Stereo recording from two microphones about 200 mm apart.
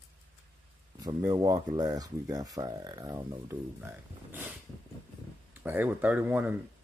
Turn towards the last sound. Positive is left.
turn(degrees=-10)  # may be behind; listen again after turning